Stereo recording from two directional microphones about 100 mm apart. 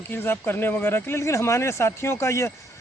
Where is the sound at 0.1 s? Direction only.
20° left (ahead or behind).